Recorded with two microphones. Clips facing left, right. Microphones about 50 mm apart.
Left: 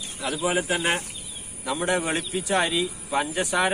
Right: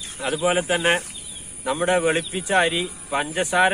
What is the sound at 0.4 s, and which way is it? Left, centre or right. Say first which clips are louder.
Speech: right 4 dB; right.